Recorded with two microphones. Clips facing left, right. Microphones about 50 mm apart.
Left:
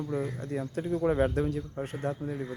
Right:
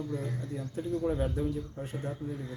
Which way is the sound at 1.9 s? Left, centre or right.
Left.